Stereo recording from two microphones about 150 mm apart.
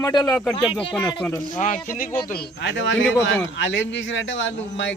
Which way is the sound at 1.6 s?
65° left (ahead or behind).